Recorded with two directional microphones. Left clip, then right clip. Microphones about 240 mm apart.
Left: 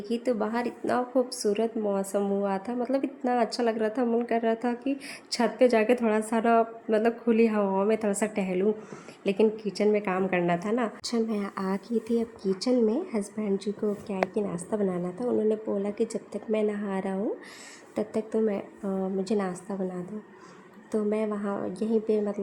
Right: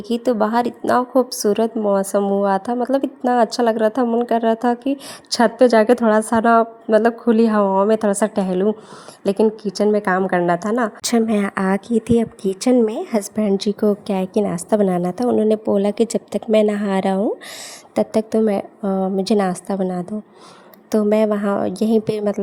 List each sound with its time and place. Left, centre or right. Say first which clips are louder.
0.1 s a woman's voice: right 11 dB; right